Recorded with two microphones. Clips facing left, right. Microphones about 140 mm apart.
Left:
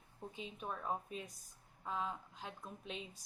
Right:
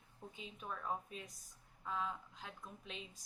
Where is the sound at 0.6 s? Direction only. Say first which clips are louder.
Left 1 dB; 20° left (ahead or behind).